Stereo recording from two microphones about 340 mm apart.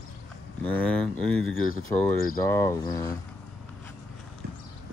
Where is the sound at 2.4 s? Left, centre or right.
Centre.